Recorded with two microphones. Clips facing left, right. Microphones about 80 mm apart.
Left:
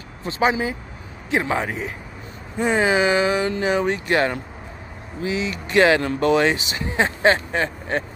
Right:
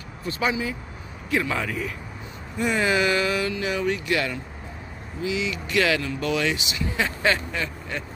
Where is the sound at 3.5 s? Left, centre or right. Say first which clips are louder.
Left 5 dB; left.